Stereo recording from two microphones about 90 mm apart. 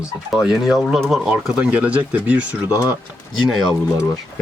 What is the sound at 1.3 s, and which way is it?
Speech, 15° right (ahead or behind).